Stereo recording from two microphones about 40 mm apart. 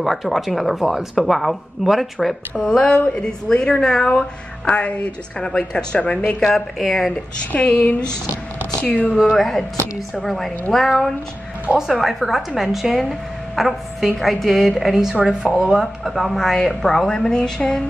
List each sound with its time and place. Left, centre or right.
0.0 s a woman's voice: centre
2.5 s a woman's voice: centre; by 5.5 s left
5.7 s a woman's voice: centre
5.9 s speech: left
6.5 s a woman's voice: centre
7.5 s speech: left
9.1 s a woman's voice: centre
16.0 s a woman's voice: centre; by 17.7 s left